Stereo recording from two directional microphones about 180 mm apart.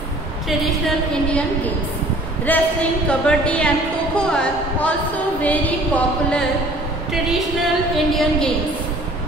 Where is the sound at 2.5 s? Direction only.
5° left (ahead or behind).